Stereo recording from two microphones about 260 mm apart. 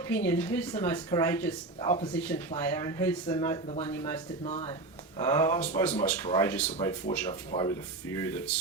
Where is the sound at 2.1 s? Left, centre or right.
Centre.